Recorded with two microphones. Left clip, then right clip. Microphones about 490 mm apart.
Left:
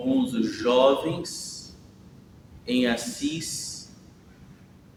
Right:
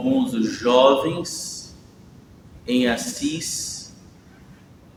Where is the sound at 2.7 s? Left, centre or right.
Left.